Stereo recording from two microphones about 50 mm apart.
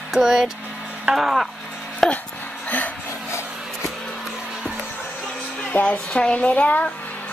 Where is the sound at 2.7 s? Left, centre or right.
Left.